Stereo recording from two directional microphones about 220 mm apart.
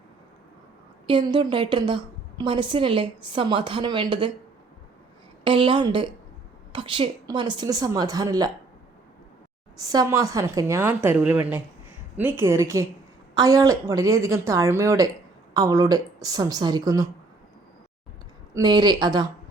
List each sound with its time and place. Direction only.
1.0 s a woman's voice: 25° right (ahead or behind)
5.4 s a woman's voice: 25° right (ahead or behind)
9.7 s a woman's voice: 15° right (ahead or behind)
18.5 s a woman's voice: 20° right (ahead or behind)